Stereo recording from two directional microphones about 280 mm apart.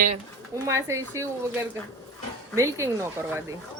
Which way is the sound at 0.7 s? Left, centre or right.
Centre.